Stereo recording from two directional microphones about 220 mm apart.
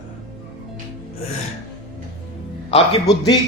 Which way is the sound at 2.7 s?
25° left (ahead or behind).